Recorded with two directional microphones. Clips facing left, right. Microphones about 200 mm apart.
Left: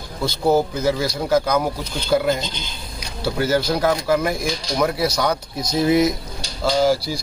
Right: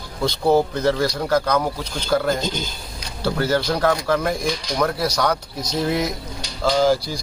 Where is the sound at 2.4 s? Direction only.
45° right (ahead or behind).